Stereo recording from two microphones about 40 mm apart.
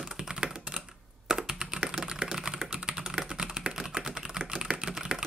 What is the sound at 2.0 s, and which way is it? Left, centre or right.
Typing, centre.